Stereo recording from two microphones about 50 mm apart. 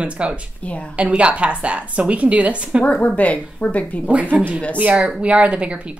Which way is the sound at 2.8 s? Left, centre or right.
Left.